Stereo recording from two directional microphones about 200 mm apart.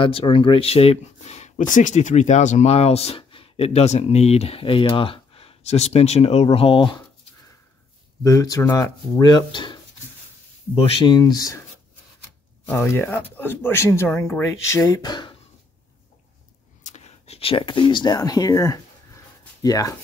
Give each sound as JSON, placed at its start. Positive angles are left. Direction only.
{"t": 0.0, "sound": "speech", "side_deg": 25}
{"t": 8.2, "sound": "speech", "side_deg": 15}
{"t": 12.6, "sound": "speech", "side_deg": 10}
{"t": 16.8, "sound": "speech", "side_deg": 35}